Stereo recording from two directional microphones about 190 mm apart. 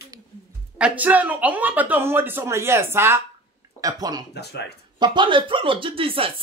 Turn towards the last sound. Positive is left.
turn(degrees=-30)  # may be behind; listen again after turning